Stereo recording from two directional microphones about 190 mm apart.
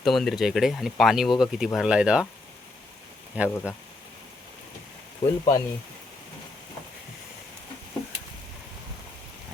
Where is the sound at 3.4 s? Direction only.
10° right (ahead or behind).